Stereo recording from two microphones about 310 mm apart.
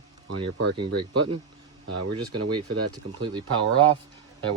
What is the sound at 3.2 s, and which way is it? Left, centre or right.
Speech, centre.